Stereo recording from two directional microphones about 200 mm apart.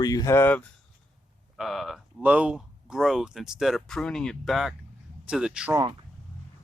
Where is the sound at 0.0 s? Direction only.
20° left (ahead or behind).